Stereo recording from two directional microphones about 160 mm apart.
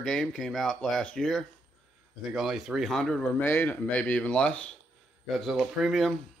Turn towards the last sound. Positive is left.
turn(degrees=0)  # may be behind; listen again after turning